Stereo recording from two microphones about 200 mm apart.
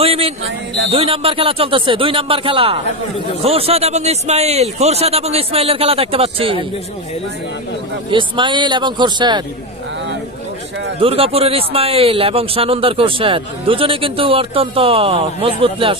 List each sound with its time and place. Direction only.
0.0 s a sound: 30° right (ahead or behind)
0.9 s a man's voice: 30° right (ahead or behind)
8.1 s a man's voice: 25° right (ahead or behind)
11.0 s a man's voice: 30° right (ahead or behind)